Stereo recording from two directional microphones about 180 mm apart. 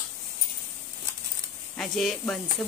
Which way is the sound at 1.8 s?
Centre (ahead or behind).